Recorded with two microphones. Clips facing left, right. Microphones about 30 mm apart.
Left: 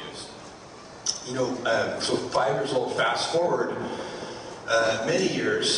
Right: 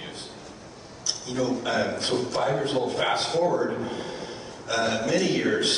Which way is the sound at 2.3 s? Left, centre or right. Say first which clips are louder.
Left 3 dB; centre.